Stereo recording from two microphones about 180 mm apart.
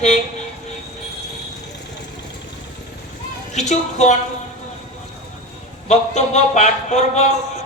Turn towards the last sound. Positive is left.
turn(degrees=40)  # may be behind; listen again after turning